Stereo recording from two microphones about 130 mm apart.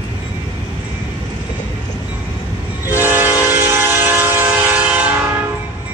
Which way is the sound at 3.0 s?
15° right (ahead or behind).